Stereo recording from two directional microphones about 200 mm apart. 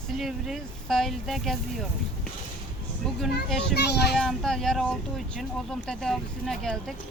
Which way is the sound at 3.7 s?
55° left (ahead or behind).